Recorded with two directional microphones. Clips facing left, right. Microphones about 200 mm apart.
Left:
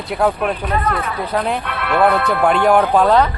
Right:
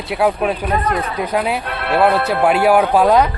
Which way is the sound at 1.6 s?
35° right (ahead or behind).